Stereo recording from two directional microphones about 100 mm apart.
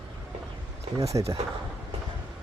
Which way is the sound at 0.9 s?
35° right (ahead or behind).